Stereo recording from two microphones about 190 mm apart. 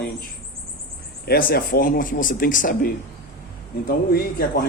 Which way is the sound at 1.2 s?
55° left (ahead or behind).